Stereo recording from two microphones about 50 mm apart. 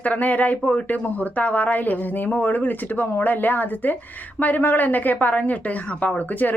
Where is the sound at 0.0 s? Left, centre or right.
Left.